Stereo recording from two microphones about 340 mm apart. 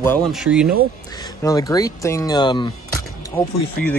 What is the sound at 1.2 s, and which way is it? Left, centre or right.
Speech, centre.